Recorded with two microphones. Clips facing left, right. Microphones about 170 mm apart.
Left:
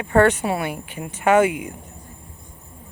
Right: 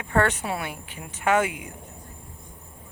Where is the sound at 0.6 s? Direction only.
55° left (ahead or behind).